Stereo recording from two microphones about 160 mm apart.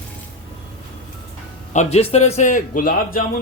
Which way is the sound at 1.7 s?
45° left (ahead or behind).